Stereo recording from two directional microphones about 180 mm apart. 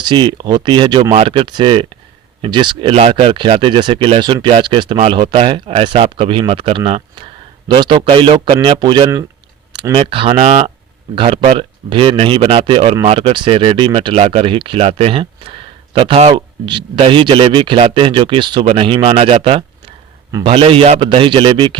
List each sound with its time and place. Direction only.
0.0 s speech: 25° right (ahead or behind)